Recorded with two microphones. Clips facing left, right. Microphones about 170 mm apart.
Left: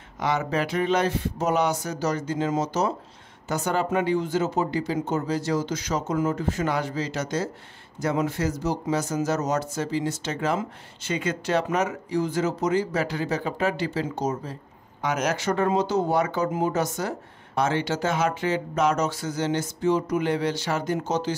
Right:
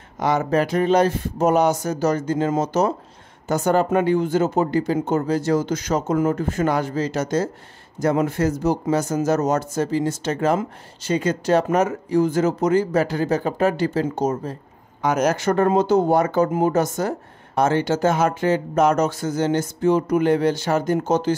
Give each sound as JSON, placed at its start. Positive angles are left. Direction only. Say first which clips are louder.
{"t": 0.2, "sound": "speech", "louder": "right 6 dB", "side_deg": -45}